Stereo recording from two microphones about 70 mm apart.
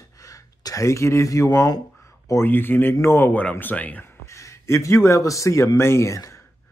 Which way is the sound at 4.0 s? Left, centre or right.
Left.